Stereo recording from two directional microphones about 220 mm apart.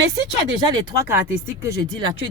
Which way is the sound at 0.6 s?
15° right (ahead or behind).